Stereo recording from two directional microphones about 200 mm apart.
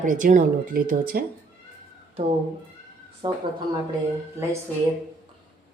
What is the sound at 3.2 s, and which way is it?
Speech, 20° right (ahead or behind).